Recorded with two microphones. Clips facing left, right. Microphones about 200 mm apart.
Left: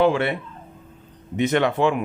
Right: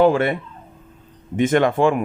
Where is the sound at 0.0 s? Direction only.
45° right (ahead or behind).